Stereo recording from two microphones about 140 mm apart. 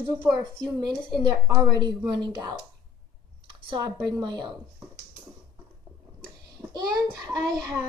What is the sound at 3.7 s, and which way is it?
Speech, 30° right (ahead or behind).